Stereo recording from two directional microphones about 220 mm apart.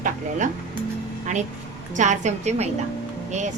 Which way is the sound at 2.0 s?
30° right (ahead or behind).